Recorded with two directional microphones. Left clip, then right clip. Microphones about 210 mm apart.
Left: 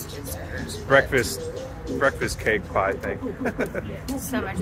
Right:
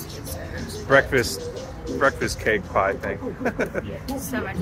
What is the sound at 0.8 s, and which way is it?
Speech, 10° right (ahead or behind).